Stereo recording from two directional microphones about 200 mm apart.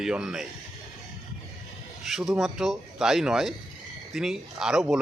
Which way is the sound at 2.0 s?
Centre (ahead or behind).